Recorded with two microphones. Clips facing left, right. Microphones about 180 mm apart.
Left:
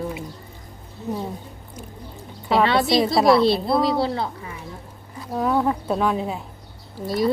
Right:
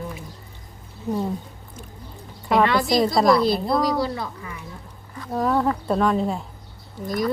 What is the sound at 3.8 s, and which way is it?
Speech, 25° left (ahead or behind).